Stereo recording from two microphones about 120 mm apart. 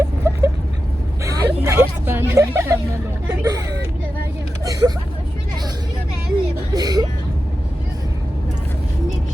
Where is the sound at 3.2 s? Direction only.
30° right (ahead or behind).